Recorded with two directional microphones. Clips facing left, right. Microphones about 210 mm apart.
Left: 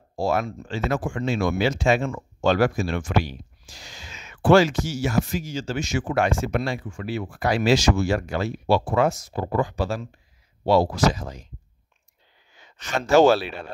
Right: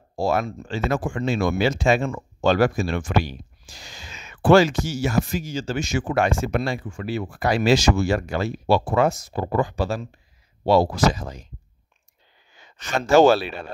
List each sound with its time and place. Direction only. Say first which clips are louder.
0.1 s speech: right 1 dB; 35° right (ahead or behind)
12.7 s speech: right 1 dB; 45° right (ahead or behind)